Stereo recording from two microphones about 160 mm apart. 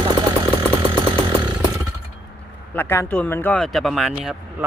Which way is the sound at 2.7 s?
15° left (ahead or behind).